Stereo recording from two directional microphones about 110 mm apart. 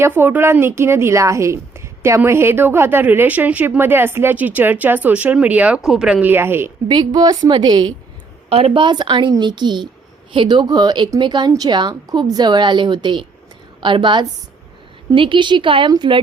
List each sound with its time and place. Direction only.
0.0 s a woman's voice: 20° right (ahead or behind); by 6.2 s 5° right (ahead or behind)
6.2 s a woman's voice: 20° right (ahead or behind)
6.8 s a woman's voice: 40° right (ahead or behind)
8.4 s speech: 70° right (ahead or behind)
8.8 s a woman's voice: 45° right (ahead or behind)